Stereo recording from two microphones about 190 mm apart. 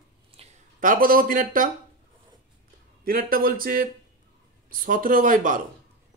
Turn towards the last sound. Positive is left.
turn(degrees=-45)  # may be behind; listen again after turning